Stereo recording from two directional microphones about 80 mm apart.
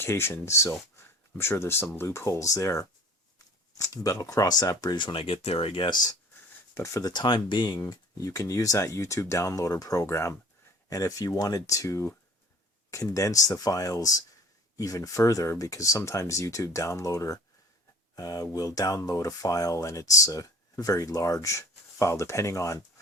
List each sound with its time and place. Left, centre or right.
0.0 s speech: left
4.9 s speech: left
5.7 s speech: left
6.7 s speech: left
7.0 s speech: left
7.8 s speech: left